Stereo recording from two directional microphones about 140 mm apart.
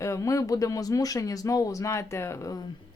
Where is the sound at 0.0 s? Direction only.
20° left (ahead or behind).